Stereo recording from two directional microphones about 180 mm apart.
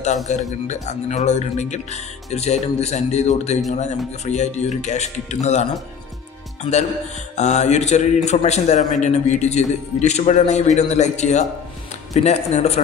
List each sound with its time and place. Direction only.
0.3 s speech: 40° left (ahead or behind)